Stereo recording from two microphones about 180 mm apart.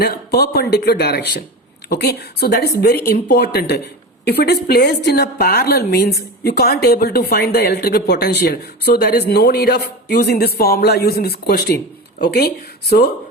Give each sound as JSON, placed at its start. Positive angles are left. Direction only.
{"t": 0.0, "sound": "a woman's voice", "side_deg": 60}